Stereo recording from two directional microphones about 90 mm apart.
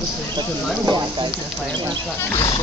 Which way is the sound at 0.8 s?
55° right (ahead or behind).